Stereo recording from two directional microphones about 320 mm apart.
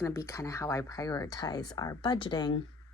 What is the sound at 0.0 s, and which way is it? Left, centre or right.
Speech, centre.